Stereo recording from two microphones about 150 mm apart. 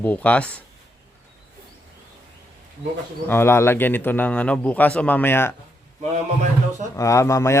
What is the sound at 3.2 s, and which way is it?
A man's voice, 15° left (ahead or behind).